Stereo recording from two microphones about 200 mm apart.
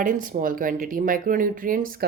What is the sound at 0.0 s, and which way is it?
Speech, 40° right (ahead or behind).